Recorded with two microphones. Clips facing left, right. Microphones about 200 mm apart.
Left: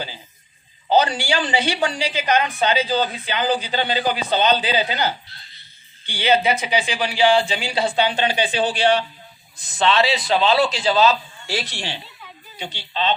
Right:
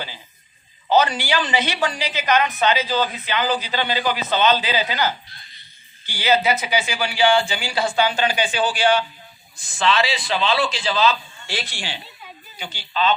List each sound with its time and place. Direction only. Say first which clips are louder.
0.9 s a woman's voice: even; 30° left (ahead or behind)
12.9 s speech: right 2 dB; 30° left (ahead or behind)